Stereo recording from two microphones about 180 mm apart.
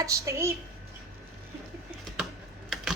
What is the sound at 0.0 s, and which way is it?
Speech, 15° right (ahead or behind).